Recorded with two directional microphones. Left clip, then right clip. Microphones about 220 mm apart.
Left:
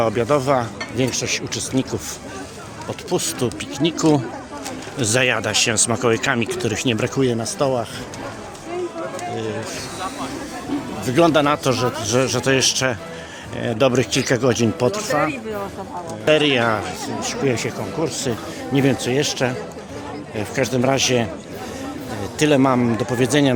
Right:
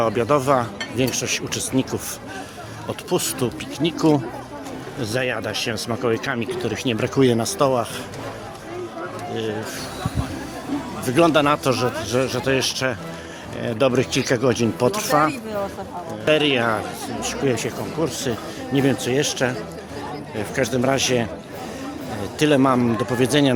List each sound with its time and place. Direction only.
0.0 s speech: 5° right (ahead or behind)
3.1 s speech: 5° right (ahead or behind)
4.9 s speech: 10° left (ahead or behind)
7.2 s speech: 20° right (ahead or behind)
11.0 s speech: 5° right (ahead or behind)
16.2 s speech: 5° left (ahead or behind)
22.4 s speech: centre (ahead or behind)